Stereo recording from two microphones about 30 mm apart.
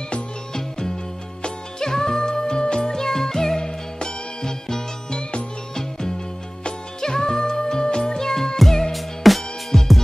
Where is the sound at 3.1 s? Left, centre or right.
Centre; by 8.2 s left.